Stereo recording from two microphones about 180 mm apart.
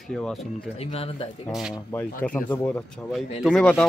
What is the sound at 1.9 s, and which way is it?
A man's voice, 10° left (ahead or behind).